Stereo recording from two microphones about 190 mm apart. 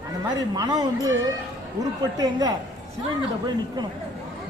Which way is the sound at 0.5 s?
20° right (ahead or behind).